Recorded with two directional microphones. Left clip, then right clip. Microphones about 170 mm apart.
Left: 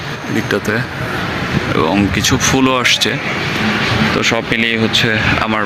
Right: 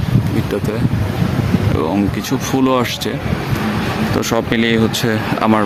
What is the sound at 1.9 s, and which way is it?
Speech, 10° right (ahead or behind).